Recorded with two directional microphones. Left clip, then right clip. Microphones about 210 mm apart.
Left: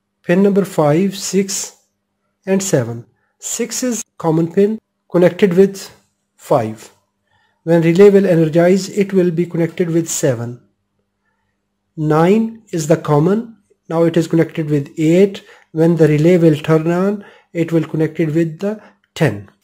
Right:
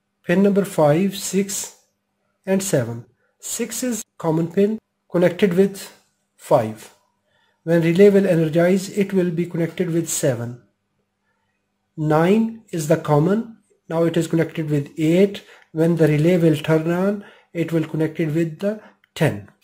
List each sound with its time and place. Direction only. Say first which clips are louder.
0.2 s speech: left 4 dB; 20° left (ahead or behind)
12.0 s speech: left 4 dB; 20° left (ahead or behind)